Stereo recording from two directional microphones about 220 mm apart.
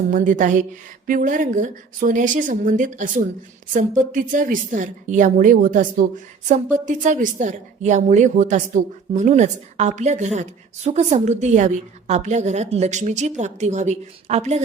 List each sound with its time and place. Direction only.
0.1 s a woman's voice: 35° right (ahead or behind)